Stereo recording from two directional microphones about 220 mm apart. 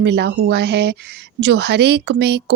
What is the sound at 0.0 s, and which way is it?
A woman's voice, 50° right (ahead or behind).